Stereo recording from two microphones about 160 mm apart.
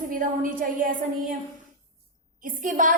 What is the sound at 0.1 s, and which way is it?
Speech, 55° right (ahead or behind).